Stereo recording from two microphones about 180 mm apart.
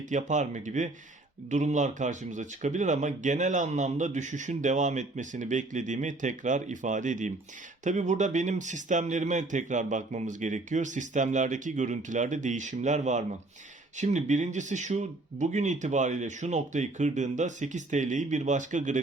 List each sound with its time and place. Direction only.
0.1 s speech: 40° right (ahead or behind)